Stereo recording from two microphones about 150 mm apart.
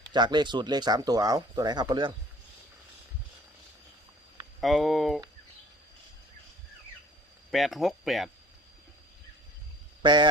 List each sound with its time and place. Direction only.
0.1 s speech: 30° right (ahead or behind)
4.6 s speech: centre (ahead or behind)
7.5 s speech: centre (ahead or behind)
10.0 s speech: 30° right (ahead or behind)